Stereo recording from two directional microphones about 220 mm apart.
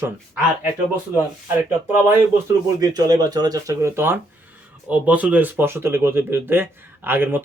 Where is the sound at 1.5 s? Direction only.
10° right (ahead or behind).